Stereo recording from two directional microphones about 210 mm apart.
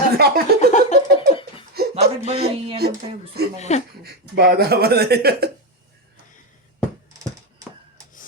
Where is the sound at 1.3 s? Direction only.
25° left (ahead or behind).